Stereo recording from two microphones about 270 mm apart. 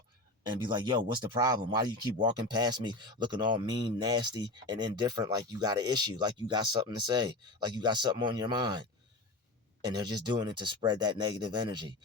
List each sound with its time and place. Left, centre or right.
0.5 s speech: centre